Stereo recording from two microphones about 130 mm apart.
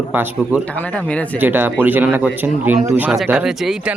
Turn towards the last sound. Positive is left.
turn(degrees=-5)  # may be behind; listen again after turning